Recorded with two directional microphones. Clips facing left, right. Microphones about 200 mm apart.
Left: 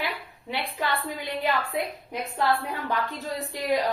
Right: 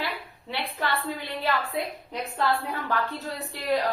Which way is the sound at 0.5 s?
15° left (ahead or behind).